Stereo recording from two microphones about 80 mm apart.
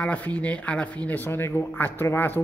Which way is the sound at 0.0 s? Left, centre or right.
Centre.